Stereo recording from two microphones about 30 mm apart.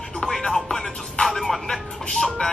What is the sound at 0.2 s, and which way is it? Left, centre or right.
Music, left.